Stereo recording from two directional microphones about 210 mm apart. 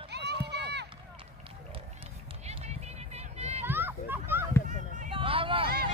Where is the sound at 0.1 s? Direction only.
50° right (ahead or behind).